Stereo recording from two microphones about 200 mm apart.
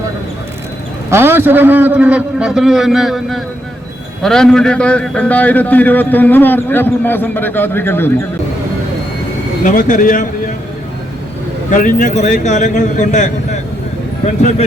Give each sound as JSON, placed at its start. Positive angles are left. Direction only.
{"t": 1.1, "sound": "a man's voice", "side_deg": -10}
{"t": 9.6, "sound": "a man's voice", "side_deg": 40}
{"t": 11.7, "sound": "a man's voice", "side_deg": 40}